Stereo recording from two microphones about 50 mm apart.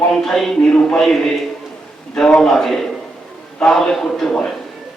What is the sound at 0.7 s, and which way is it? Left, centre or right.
Speech, left.